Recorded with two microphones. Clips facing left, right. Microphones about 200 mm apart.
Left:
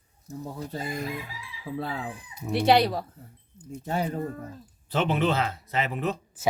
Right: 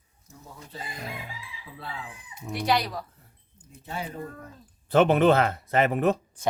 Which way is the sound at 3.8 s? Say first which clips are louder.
Left 6 dB; 45° left (ahead or behind).